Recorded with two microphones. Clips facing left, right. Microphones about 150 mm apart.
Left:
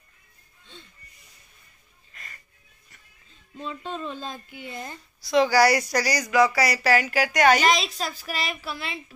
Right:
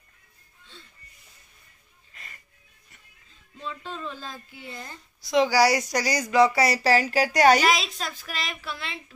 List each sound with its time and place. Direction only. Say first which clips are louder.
3.6 s speech: left 3 dB; 20° left (ahead or behind)
5.2 s speech: left 1 dB; 20° right (ahead or behind); by 7.6 s 35° right (ahead or behind)
7.6 s a woman's voice: left 1 dB; centre (ahead or behind)